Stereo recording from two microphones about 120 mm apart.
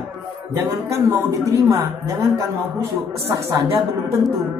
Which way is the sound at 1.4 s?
25° right (ahead or behind).